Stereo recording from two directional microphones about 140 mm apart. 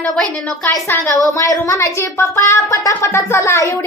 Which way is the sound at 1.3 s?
25° left (ahead or behind).